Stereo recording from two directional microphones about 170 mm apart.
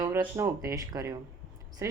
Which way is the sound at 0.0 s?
15° right (ahead or behind).